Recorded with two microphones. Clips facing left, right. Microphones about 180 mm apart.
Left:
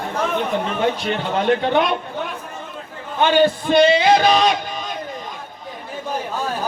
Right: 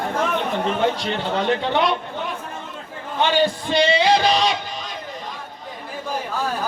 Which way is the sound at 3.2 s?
50° left (ahead or behind).